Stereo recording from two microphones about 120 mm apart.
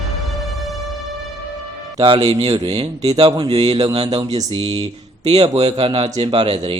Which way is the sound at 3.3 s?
45° right (ahead or behind).